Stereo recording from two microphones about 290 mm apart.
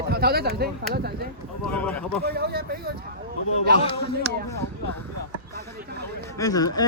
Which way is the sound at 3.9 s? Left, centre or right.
Centre.